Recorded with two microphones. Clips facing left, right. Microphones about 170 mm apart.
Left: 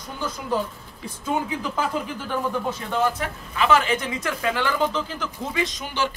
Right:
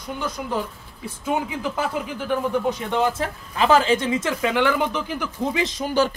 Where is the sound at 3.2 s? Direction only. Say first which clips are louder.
Right 3 dB; 35° right (ahead or behind); by 5.7 s 15° right (ahead or behind).